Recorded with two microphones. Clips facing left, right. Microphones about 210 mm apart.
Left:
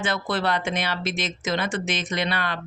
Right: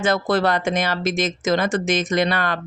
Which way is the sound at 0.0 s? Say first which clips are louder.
Right 7 dB; 40° right (ahead or behind).